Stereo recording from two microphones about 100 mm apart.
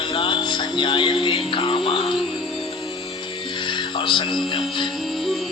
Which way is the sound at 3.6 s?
50° left (ahead or behind).